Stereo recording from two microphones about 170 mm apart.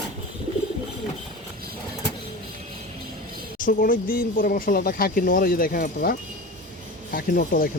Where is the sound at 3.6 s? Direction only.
55° left (ahead or behind).